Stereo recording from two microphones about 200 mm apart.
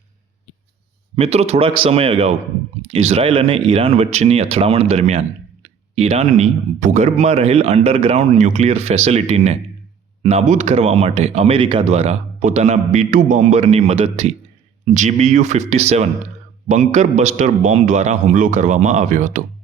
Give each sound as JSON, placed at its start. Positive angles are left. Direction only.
{"t": 1.1, "sound": "speech", "side_deg": -30}